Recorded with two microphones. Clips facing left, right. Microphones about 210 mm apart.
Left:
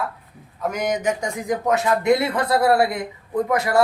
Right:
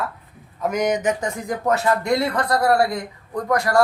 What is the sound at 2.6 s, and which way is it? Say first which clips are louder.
Speech: even; 25° left (ahead or behind).